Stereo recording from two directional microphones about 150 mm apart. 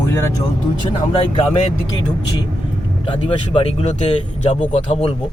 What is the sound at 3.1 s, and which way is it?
Speech, 35° left (ahead or behind).